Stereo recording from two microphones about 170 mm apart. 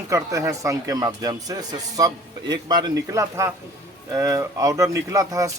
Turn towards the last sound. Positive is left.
turn(degrees=-20)  # may be behind; listen again after turning